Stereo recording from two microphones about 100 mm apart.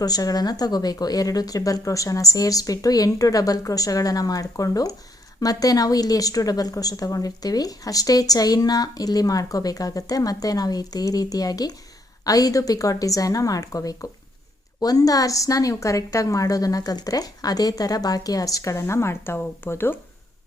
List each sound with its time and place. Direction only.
0.0 s a woman's voice: 40° left (ahead or behind); by 20.0 s 20° left (ahead or behind)